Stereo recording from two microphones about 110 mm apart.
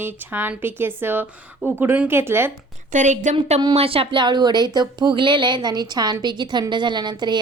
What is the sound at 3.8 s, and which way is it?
Speech, 55° right (ahead or behind).